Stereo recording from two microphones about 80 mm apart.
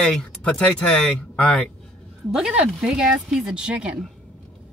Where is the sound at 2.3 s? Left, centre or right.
Centre.